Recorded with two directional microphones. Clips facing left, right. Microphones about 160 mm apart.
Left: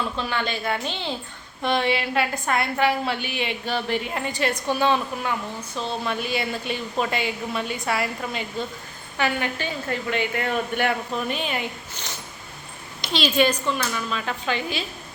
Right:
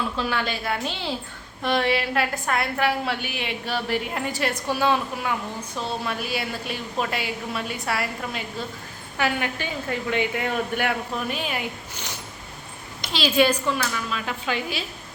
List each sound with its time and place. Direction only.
0.2 s a woman's voice: 5° right (ahead or behind)
13.1 s a woman's voice: 5° right (ahead or behind)